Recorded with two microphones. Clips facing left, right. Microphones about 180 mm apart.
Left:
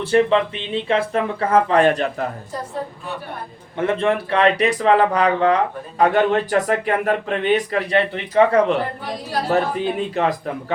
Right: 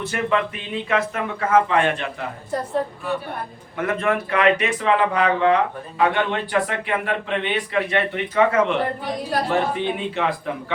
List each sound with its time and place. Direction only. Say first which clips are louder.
0.0 s speech: left 6 dB; 30° left (ahead or behind)
3.8 s speech: left 3 dB; 30° left (ahead or behind)